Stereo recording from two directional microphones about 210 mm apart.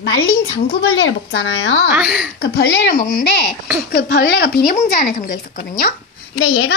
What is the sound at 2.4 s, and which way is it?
Speech, 55° left (ahead or behind).